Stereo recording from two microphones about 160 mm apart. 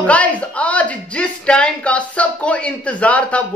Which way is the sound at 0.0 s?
10° left (ahead or behind).